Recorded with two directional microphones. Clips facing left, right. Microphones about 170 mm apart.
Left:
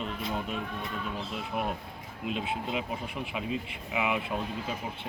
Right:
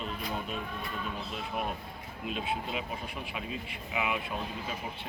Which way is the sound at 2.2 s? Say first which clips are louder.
Left 2 dB; 20° left (ahead or behind).